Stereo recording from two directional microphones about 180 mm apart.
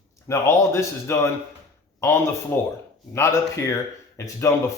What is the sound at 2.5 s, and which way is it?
Speech, 15° left (ahead or behind).